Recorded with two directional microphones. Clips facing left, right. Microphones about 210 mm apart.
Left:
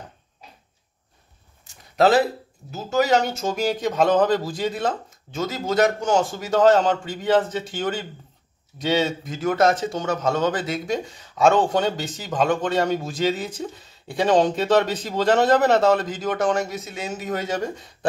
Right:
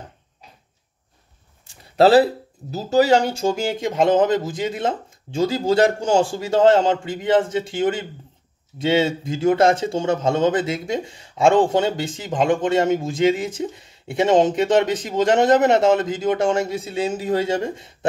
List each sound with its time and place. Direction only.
2.0 s speech: 30° right (ahead or behind)
8.8 s speech: 25° right (ahead or behind)